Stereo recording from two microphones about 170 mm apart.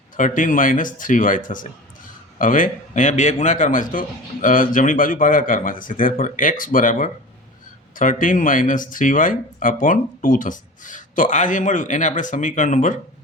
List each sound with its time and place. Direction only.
0.2 s speech: 50° left (ahead or behind)